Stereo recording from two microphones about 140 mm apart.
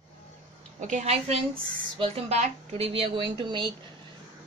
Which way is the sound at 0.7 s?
60° right (ahead or behind).